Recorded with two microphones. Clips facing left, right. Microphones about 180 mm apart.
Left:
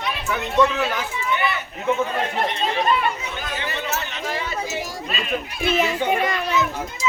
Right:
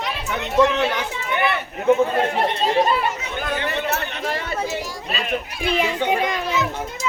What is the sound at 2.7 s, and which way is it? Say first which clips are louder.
Speech: right 3 dB; 25° right (ahead or behind).